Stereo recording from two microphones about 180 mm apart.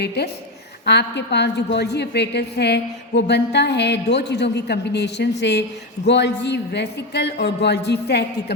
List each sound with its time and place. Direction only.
0.2 s a woman's voice: 65° left (ahead or behind)